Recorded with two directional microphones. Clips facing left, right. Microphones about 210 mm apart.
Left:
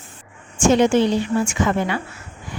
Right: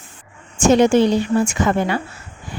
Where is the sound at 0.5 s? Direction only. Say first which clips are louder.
Right 2 dB; 40° right (ahead or behind).